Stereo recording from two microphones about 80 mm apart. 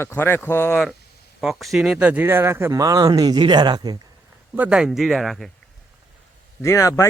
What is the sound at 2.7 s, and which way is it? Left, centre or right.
Speech, right.